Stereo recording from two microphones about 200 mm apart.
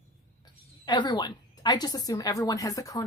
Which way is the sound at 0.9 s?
20° left (ahead or behind).